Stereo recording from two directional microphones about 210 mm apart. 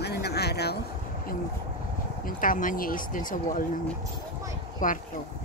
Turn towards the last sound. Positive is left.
turn(degrees=40)  # may be behind; listen again after turning